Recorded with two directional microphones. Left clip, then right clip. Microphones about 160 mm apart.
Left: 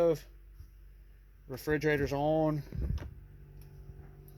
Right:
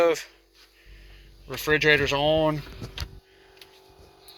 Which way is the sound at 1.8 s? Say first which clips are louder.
Right 10 dB; 40° left (ahead or behind).